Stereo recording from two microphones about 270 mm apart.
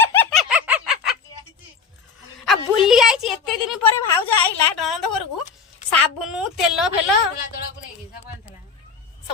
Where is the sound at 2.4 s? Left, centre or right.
Centre.